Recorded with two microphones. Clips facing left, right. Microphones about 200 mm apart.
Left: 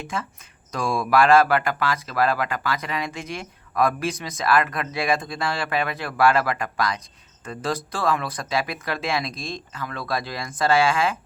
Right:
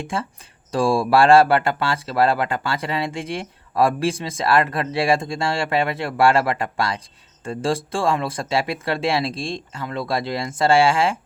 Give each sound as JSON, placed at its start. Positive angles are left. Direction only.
{"t": 0.1, "sound": "speech", "side_deg": -30}